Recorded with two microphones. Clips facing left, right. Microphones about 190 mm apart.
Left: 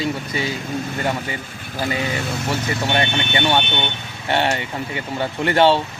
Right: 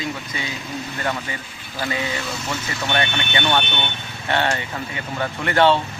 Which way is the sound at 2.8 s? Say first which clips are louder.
Even; 25° left (ahead or behind).